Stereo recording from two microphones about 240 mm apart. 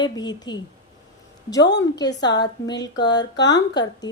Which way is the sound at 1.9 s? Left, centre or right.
Centre.